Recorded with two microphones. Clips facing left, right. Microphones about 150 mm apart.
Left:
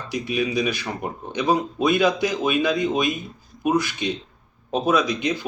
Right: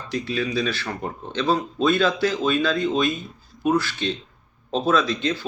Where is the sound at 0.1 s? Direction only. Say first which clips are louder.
Left 1 dB; 15° left (ahead or behind).